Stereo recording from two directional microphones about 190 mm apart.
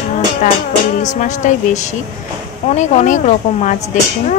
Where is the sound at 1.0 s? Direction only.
40° left (ahead or behind).